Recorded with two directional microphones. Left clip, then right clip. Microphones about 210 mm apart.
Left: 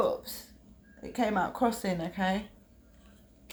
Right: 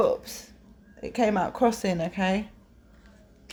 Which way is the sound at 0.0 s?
35° right (ahead or behind).